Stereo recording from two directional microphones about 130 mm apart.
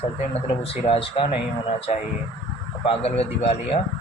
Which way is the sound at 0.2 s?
50° left (ahead or behind).